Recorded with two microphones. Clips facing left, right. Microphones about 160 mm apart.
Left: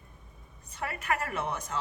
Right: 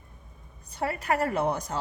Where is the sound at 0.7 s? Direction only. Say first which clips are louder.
Right 5 dB; 35° right (ahead or behind).